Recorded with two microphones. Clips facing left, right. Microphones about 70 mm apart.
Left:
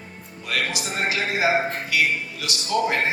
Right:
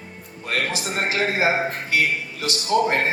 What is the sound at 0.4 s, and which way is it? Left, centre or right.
A man's voice, right.